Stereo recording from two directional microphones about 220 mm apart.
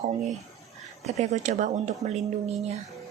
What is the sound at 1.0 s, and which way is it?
A woman's voice, 30° right (ahead or behind).